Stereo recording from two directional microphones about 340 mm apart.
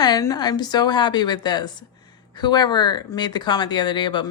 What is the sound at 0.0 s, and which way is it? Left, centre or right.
A woman's voice, centre.